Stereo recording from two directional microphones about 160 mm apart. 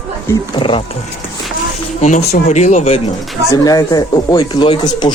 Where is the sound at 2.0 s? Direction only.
45° left (ahead or behind).